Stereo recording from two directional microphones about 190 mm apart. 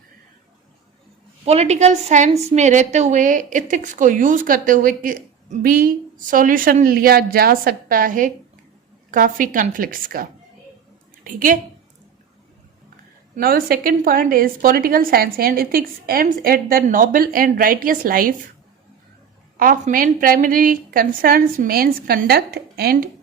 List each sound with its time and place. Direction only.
1.5 s a woman's voice: 35° right (ahead or behind)
13.3 s a woman's voice: 50° right (ahead or behind)
19.5 s a woman's voice: 45° right (ahead or behind)